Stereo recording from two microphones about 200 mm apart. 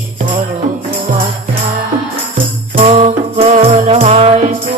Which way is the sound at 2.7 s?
30° right (ahead or behind).